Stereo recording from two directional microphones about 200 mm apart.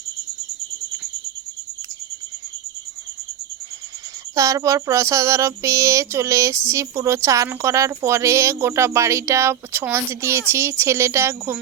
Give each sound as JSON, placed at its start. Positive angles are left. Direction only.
{"t": 4.4, "sound": "a woman's voice", "side_deg": -15}